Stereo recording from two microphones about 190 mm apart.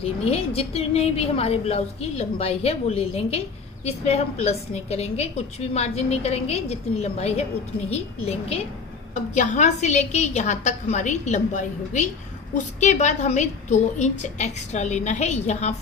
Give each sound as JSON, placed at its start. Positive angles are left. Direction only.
{"t": 0.3, "sound": "a woman's voice", "side_deg": 30}